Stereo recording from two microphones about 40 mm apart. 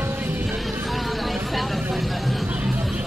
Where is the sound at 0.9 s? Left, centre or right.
Centre.